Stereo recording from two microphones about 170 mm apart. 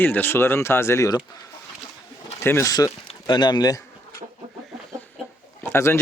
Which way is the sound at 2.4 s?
15° left (ahead or behind).